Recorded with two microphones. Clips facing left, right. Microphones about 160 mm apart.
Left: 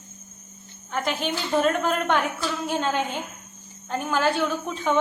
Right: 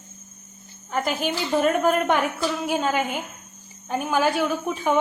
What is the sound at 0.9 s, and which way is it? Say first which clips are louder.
A woman's voice: right 2 dB; 10° right (ahead or behind).